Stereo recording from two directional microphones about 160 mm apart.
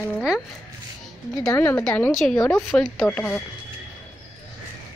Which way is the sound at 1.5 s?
15° left (ahead or behind).